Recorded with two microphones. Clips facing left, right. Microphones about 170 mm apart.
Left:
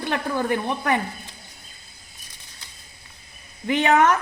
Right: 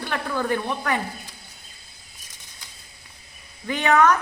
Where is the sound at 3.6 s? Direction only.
20° left (ahead or behind).